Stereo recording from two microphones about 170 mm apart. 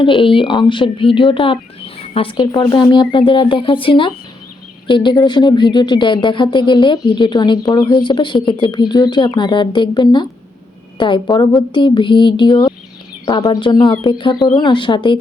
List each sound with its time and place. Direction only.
0.0 s speech: 30° left (ahead or behind)